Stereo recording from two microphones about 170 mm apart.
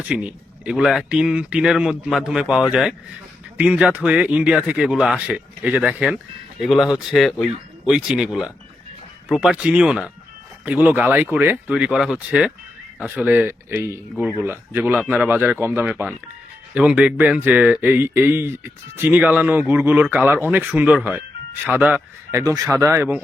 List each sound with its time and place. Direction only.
0.0 s speech: 10° right (ahead or behind)